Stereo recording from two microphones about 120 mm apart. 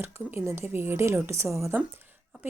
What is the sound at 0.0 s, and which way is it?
Speech, 20° right (ahead or behind).